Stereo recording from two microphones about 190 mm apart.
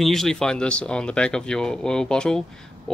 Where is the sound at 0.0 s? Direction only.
Centre (ahead or behind).